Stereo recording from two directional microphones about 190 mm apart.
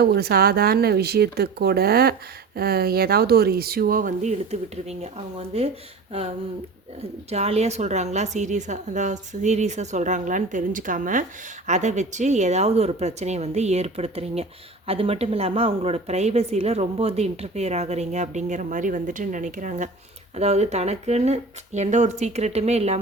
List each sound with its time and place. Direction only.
0.0 s a woman's voice: 55° right (ahead or behind); by 5.7 s 35° right (ahead or behind)
7.3 s a woman's voice: 35° right (ahead or behind)